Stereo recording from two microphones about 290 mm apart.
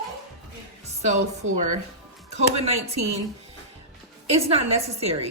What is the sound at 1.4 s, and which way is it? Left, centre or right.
Speech, right.